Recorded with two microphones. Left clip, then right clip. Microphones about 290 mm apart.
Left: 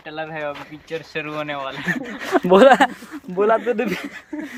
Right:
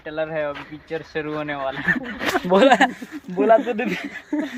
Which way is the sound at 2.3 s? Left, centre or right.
Left.